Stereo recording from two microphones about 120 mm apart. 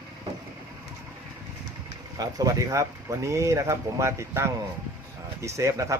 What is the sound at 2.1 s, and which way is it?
A man's voice, 30° right (ahead or behind).